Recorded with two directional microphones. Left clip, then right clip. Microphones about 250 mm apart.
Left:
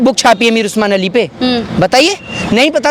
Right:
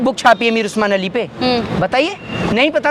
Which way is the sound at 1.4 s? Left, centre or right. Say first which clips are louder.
Left 3 dB; left.